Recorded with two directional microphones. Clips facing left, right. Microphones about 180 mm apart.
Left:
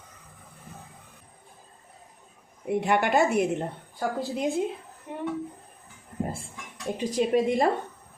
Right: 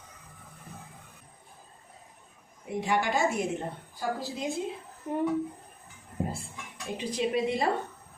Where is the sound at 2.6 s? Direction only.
60° left (ahead or behind).